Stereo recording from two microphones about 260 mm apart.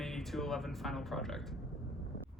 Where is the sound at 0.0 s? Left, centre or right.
Centre.